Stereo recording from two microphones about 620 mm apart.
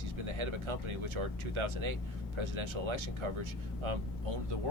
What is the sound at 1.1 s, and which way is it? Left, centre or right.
Speech, right.